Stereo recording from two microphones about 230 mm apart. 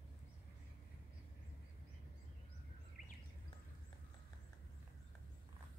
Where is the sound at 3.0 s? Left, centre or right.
Left.